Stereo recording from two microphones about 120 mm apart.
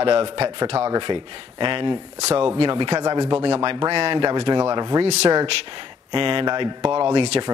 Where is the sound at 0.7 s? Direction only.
25° right (ahead or behind).